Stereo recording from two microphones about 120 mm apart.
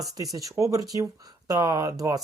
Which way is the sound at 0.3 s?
25° right (ahead or behind).